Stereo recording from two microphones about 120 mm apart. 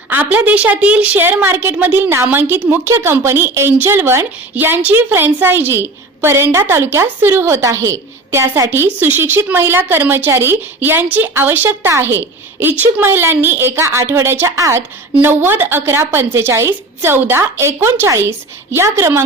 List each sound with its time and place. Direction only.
0.1 s a woman's voice: 15° right (ahead or behind)